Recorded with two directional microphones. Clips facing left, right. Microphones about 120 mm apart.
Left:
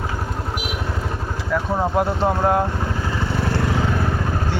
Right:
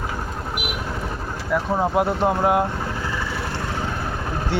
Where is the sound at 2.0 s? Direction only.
10° right (ahead or behind).